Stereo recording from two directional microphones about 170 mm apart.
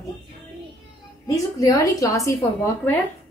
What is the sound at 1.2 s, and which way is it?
A woman's voice, 20° left (ahead or behind).